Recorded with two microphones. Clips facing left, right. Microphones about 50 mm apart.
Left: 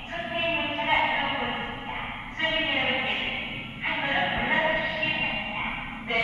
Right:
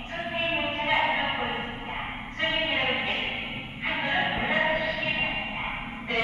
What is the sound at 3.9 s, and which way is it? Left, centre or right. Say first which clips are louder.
Music: even; left.